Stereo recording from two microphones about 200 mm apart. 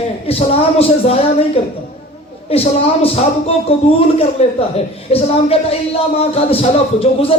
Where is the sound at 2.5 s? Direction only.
30° left (ahead or behind).